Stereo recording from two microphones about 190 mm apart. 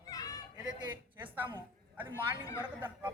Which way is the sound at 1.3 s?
10° right (ahead or behind).